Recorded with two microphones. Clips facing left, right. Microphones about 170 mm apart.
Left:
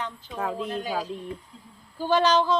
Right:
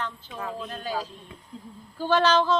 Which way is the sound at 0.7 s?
15° left (ahead or behind).